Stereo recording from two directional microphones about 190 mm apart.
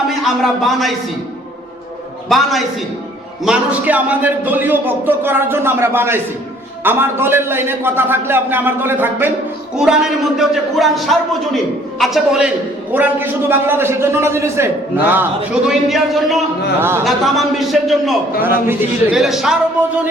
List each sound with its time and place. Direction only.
0.1 s speech: centre (ahead or behind)
2.3 s a man's voice: centre (ahead or behind)
18.4 s a man's voice: 10° right (ahead or behind)